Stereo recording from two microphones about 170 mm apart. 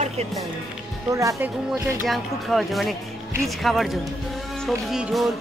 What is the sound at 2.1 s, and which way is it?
Speech, centre (ahead or behind).